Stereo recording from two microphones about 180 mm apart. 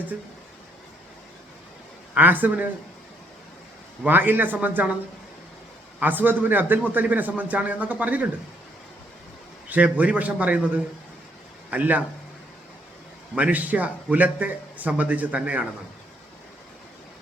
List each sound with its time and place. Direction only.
2.1 s speech: 10° right (ahead or behind)
4.0 s speech: 10° right (ahead or behind)
6.0 s speech: 10° right (ahead or behind)
9.6 s speech: 10° right (ahead or behind)
13.3 s speech: 10° right (ahead or behind)